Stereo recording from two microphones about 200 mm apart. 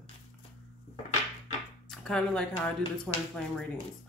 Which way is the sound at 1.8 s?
5° left (ahead or behind).